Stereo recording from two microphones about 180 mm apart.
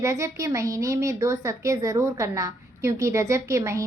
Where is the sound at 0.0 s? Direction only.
15° right (ahead or behind).